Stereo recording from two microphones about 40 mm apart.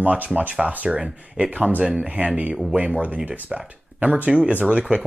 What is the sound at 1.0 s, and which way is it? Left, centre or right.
Speech, centre.